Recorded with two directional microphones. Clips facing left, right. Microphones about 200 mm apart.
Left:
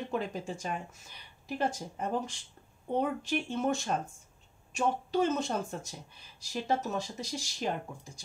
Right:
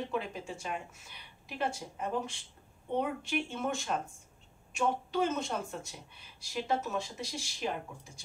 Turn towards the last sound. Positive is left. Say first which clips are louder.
# left 2 dB
turn(degrees=40)  # may be behind; listen again after turning